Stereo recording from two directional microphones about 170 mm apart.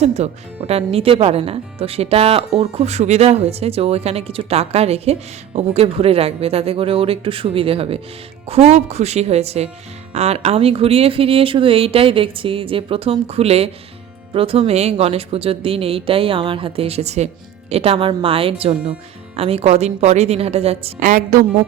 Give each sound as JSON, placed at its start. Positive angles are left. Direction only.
{"t": 0.0, "sound": "speech", "side_deg": -40}
{"t": 21.1, "sound": "a woman's voice", "side_deg": -50}